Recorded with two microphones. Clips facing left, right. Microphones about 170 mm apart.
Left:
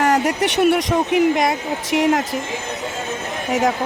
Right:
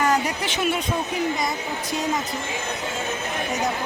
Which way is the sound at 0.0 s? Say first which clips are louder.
Left 5 dB; 75° left (ahead or behind).